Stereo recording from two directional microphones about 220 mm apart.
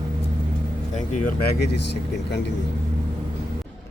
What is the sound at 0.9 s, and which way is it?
Speech, 35° left (ahead or behind).